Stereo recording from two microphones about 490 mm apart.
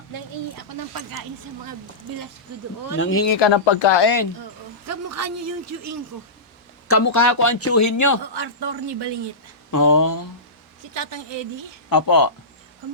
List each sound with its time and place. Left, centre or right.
2.9 s speech: left
3.4 s speech: left
4.9 s speech: right
6.8 s speech: left
8.2 s speech: right
9.7 s speech: left
10.9 s a woman's voice: right
11.9 s speech: left